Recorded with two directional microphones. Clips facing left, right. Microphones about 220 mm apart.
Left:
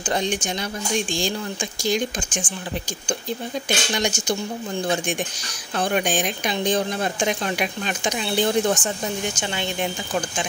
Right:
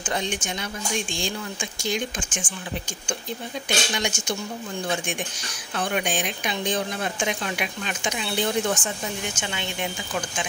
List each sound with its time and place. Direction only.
0.0 s speech: 35° left (ahead or behind)
3.6 s speech: 40° left (ahead or behind)
5.8 s speech: 40° left (ahead or behind)